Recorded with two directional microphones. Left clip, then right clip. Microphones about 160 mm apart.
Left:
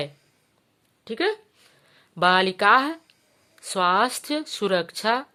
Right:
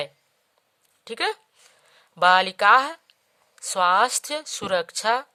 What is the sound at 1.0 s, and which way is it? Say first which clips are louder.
Speech: left 1 dB; 45° right (ahead or behind).